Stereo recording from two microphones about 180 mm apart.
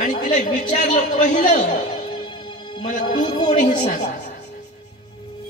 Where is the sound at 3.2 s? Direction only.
25° left (ahead or behind).